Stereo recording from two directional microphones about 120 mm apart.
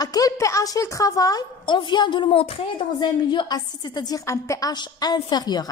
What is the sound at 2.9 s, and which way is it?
A woman's voice, 40° left (ahead or behind).